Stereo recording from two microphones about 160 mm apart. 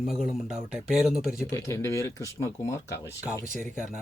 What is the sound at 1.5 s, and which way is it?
Speech, 15° left (ahead or behind).